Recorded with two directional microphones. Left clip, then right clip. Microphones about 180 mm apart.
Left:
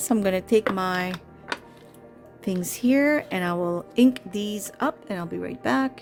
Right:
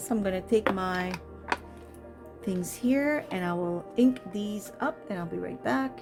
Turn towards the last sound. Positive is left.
turn(degrees=40)  # may be behind; listen again after turning